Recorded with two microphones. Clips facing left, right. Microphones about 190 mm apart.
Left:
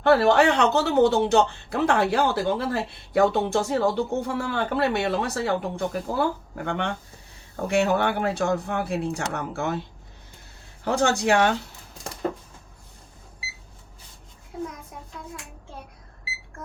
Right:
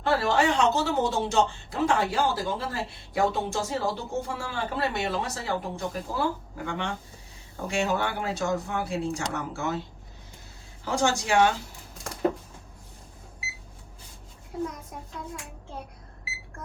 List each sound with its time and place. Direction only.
0.0 s speech: 60° left (ahead or behind)
10.8 s speech: 60° left (ahead or behind)